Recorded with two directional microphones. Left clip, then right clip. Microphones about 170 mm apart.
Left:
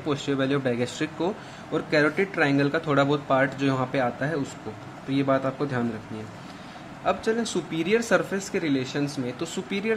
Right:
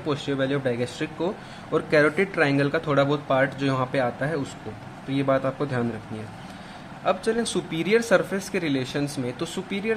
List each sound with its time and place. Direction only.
0.0 s speech: centre (ahead or behind)
1.7 s speech: 20° right (ahead or behind)
2.9 s speech: centre (ahead or behind)
7.1 s speech: 10° right (ahead or behind)
9.7 s speech: centre (ahead or behind)